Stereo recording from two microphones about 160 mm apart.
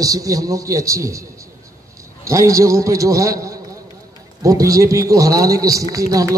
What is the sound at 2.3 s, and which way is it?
A man's voice, 20° right (ahead or behind).